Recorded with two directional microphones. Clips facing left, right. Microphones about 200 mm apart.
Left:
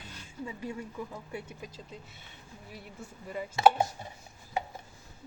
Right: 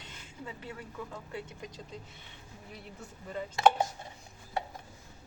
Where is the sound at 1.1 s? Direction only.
10° left (ahead or behind).